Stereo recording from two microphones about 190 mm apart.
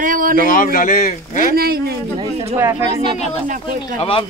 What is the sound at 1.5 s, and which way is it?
Speech, 55° right (ahead or behind).